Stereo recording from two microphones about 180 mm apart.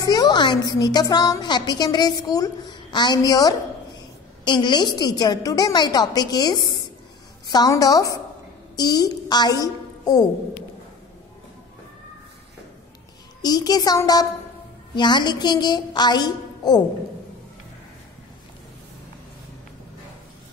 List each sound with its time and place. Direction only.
0.0 s a woman's voice: 20° left (ahead or behind)
13.4 s a woman's voice: 20° left (ahead or behind)